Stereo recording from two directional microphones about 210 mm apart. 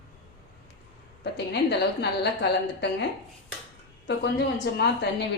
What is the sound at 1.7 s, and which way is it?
A woman's voice, 55° left (ahead or behind).